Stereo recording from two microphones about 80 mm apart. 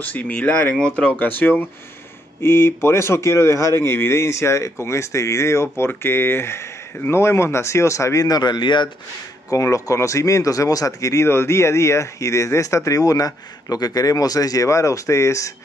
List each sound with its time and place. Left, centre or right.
0.0 s speech: left
9.5 s speech: left